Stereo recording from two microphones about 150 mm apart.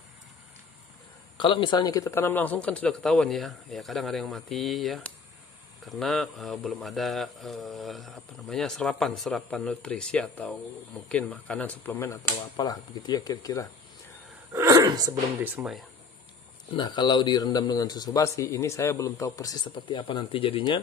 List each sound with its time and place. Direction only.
1.4 s speech: 35° left (ahead or behind); by 12.2 s 15° left (ahead or behind)
12.5 s speech: 25° left (ahead or behind)
14.5 s a sound: 25° right (ahead or behind)
15.4 s speech: 5° right (ahead or behind)
16.7 s speech: 30° left (ahead or behind)
19.7 s speech: 35° left (ahead or behind)